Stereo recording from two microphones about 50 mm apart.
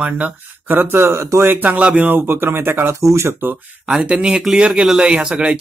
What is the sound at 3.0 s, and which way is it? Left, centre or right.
Speech, right.